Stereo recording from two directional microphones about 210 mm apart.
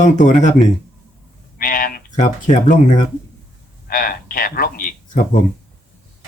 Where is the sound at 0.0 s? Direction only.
35° left (ahead or behind).